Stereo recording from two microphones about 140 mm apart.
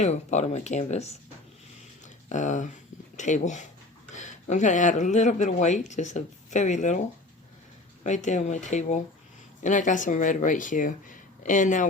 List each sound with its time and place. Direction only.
0.0 s speech: 55° left (ahead or behind)
2.3 s speech: 60° left (ahead or behind)
8.0 s speech: 60° left (ahead or behind)